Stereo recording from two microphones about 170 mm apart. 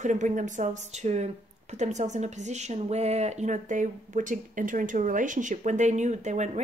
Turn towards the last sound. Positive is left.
turn(degrees=-45)  # may be behind; listen again after turning